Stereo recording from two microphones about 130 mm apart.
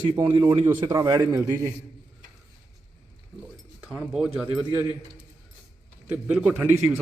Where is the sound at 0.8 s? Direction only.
30° right (ahead or behind).